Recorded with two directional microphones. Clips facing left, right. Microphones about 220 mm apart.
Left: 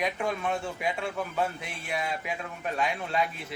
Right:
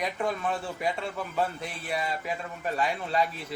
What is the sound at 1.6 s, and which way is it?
Speech, centre (ahead or behind).